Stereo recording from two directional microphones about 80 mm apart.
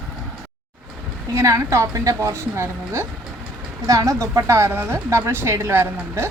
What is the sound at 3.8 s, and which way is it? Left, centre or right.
Speech, right.